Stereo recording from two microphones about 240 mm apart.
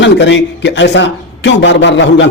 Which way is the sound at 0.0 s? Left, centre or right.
Left.